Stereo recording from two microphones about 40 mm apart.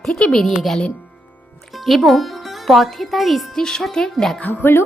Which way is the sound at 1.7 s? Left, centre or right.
Centre.